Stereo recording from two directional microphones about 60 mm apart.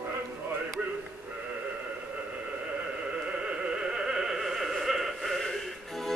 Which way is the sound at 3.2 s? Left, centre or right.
Centre.